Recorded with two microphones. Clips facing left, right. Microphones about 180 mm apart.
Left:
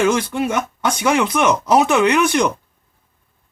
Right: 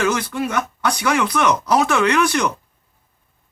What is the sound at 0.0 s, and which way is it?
Speech, 25° left (ahead or behind).